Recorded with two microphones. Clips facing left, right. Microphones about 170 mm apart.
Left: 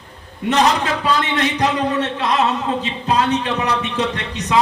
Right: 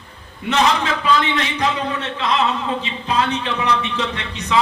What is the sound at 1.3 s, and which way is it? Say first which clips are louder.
A man's voice: left 3 dB; 45° left (ahead or behind).